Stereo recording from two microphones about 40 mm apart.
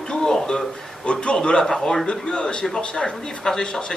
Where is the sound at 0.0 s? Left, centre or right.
Centre.